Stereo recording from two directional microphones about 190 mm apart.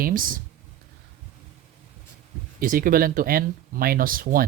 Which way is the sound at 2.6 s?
45° right (ahead or behind).